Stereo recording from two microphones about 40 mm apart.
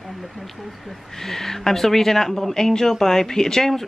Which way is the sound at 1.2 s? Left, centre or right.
Centre.